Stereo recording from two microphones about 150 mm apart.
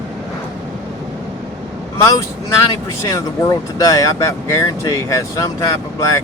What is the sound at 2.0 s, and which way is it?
Speech, 20° left (ahead or behind).